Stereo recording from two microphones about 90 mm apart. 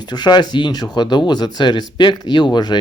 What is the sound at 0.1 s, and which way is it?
Speech, 55° left (ahead or behind).